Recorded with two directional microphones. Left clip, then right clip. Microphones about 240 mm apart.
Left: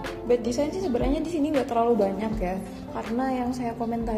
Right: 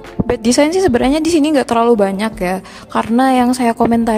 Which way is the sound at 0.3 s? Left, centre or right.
Right.